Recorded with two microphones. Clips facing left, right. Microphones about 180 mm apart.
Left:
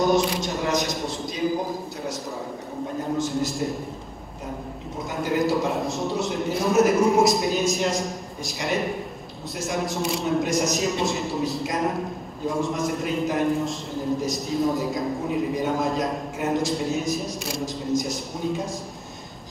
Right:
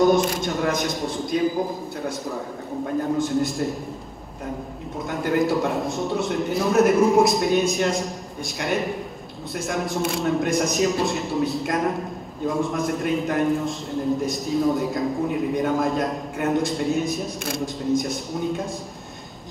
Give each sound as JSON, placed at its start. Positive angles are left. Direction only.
{"t": 0.1, "sound": "a man's voice", "side_deg": -50}
{"t": 3.3, "sound": "a man's voice", "side_deg": 0}
{"t": 5.1, "sound": "a man's voice", "side_deg": 0}